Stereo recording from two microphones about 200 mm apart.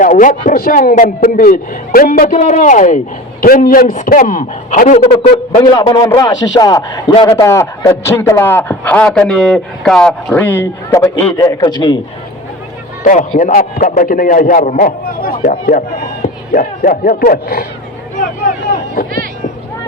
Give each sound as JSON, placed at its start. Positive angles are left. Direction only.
{"t": 0.0, "sound": "a man's voice", "side_deg": 40}
{"t": 5.7, "sound": "a man's voice", "side_deg": 20}
{"t": 13.1, "sound": "a man's voice", "side_deg": 35}